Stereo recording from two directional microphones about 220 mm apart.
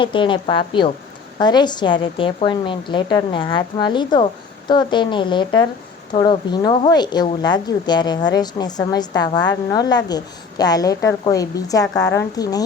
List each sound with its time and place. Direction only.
0.0 s a woman's voice: 20° left (ahead or behind)